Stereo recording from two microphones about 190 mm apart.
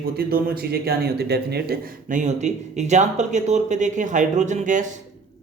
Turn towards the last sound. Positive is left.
turn(degrees=-40)  # may be behind; listen again after turning